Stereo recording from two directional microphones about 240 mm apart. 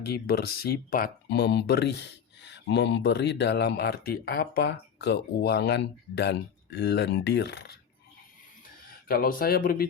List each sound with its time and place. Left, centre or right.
0.1 s speech: left
8.9 s speech: left